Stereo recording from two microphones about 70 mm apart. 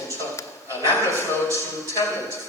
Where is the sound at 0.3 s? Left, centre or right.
Left.